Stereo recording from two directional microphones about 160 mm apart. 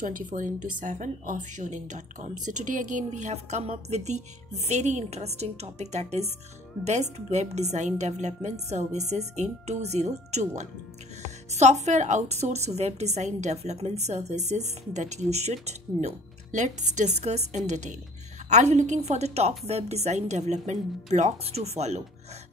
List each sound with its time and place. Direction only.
0.0 s speech: 55° right (ahead or behind)